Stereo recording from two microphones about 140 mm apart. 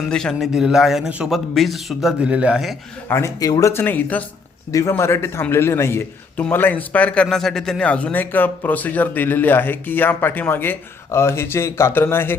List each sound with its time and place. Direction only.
0.1 s a man's voice: 5° left (ahead or behind)
3.1 s a man's voice: 20° left (ahead or behind)